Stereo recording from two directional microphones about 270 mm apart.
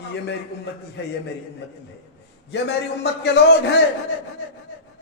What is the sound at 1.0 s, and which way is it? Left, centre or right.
Speech, left.